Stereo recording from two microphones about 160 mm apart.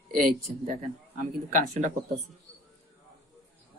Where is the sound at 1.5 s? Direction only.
50° right (ahead or behind).